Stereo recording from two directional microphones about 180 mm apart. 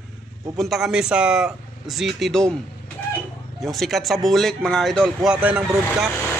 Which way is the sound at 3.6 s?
Centre (ahead or behind).